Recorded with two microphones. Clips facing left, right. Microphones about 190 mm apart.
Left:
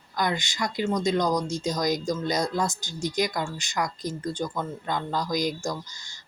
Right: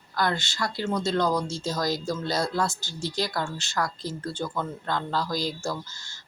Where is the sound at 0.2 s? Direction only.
15° left (ahead or behind).